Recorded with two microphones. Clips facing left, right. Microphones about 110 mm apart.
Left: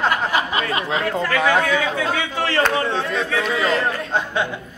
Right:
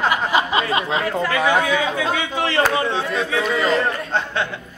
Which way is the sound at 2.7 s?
5° right (ahead or behind).